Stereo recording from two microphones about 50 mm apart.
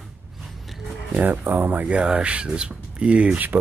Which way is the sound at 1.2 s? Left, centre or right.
Right.